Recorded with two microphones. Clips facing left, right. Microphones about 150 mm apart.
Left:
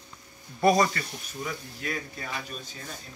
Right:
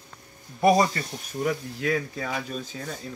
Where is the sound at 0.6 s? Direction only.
20° right (ahead or behind).